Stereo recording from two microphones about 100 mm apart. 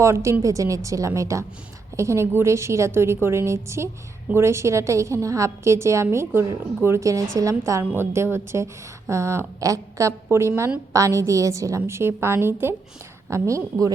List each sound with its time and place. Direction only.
0.0 s a woman's voice: 30° right (ahead or behind)